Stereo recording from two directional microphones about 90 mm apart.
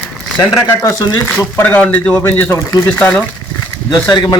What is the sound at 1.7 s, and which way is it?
Speech, 15° left (ahead or behind).